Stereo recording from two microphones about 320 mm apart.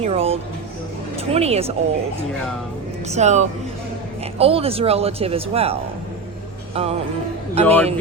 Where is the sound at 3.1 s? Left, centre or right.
Right.